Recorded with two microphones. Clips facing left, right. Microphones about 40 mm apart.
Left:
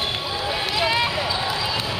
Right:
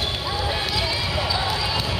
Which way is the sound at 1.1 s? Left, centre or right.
Centre.